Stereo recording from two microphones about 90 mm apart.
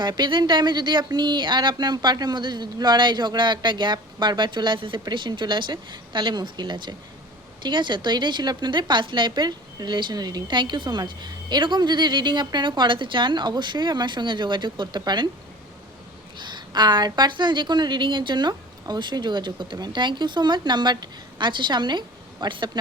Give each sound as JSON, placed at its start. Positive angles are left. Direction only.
{"t": 0.0, "sound": "a woman's voice", "side_deg": -55}
{"t": 16.4, "sound": "a woman's voice", "side_deg": -55}